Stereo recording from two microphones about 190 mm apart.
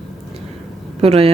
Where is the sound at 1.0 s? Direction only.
30° right (ahead or behind).